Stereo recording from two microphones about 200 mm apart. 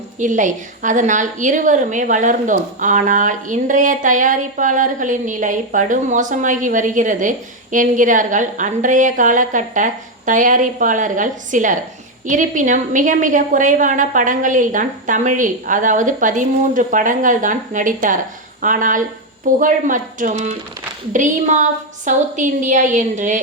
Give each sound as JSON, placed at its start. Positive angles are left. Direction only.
{"t": 0.2, "sound": "a woman's voice", "side_deg": -40}